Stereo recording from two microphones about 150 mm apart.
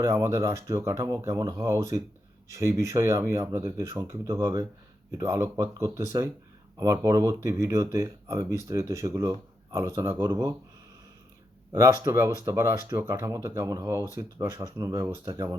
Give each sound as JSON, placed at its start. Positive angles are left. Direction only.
{"t": 0.0, "sound": "speech", "side_deg": -20}
{"t": 12.0, "sound": "speech", "side_deg": -15}